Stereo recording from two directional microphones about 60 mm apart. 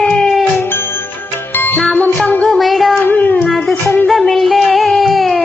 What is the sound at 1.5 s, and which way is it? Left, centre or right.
Music, left.